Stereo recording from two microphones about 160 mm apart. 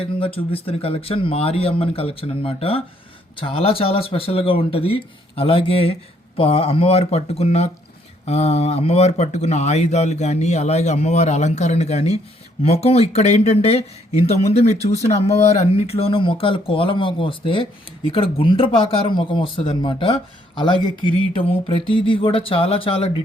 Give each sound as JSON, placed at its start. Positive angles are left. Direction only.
{"t": 0.0, "sound": "speech", "side_deg": 35}